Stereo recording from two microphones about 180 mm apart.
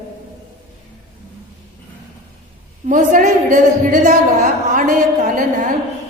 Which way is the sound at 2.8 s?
45° right (ahead or behind).